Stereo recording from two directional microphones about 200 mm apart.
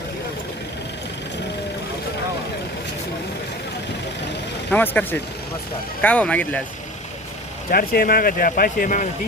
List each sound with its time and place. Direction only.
4.7 s speech: 10° left (ahead or behind)
7.7 s speech: 45° left (ahead or behind)